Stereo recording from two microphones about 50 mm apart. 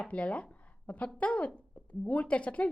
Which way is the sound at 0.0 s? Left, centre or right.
Left.